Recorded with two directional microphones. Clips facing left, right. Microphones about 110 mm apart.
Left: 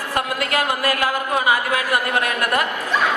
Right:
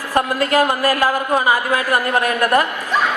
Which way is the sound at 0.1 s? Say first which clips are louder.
Right 6 dB; 35° right (ahead or behind).